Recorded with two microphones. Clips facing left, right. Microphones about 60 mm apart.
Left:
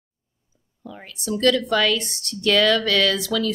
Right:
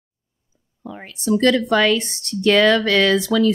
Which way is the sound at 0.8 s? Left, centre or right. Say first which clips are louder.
Right 7 dB; right.